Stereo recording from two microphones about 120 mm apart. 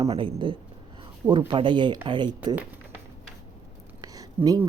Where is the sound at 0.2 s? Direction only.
40° right (ahead or behind).